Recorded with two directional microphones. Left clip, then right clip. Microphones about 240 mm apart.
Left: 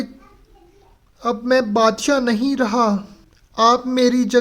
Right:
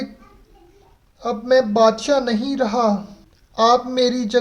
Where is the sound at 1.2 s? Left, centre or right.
Left.